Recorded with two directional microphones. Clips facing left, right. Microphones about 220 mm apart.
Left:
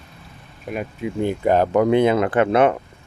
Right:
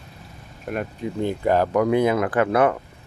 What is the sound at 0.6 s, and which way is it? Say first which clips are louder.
Speech: even; centre (ahead or behind).